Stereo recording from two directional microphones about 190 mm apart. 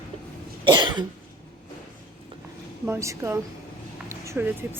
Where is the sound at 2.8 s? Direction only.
15° right (ahead or behind).